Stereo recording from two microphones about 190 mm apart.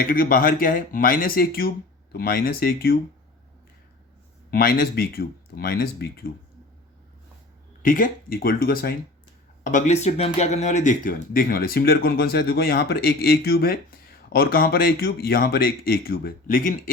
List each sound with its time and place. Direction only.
0.0 s speech: 50° left (ahead or behind)
4.5 s speech: 50° left (ahead or behind)
7.8 s speech: 45° left (ahead or behind)
9.6 s speech: 40° left (ahead or behind)